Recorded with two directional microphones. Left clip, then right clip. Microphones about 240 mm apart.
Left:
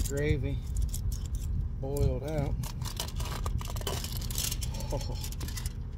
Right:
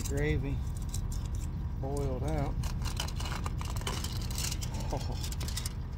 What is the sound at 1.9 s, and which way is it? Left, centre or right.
Speech, left.